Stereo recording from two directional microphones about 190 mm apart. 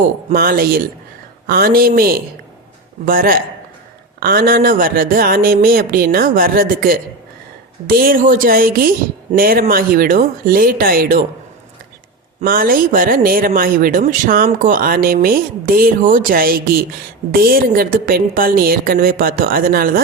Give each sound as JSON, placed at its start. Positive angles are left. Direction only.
{"t": 0.3, "sound": "speech", "side_deg": -50}
{"t": 12.4, "sound": "speech", "side_deg": -50}